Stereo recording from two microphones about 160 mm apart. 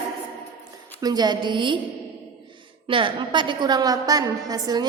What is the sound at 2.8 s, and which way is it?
A woman's voice, 30° right (ahead or behind).